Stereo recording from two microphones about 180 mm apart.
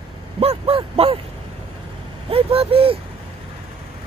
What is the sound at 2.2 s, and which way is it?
Speech, 35° right (ahead or behind).